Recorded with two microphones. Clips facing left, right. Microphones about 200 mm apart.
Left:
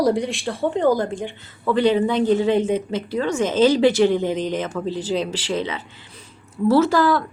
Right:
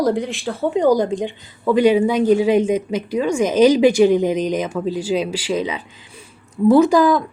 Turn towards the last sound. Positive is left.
turn(degrees=-15)  # may be behind; listen again after turning